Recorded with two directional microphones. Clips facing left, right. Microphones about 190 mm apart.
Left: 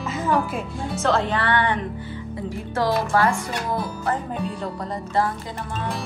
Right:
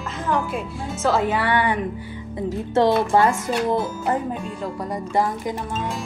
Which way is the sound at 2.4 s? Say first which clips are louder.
Right 5 dB; 25° right (ahead or behind).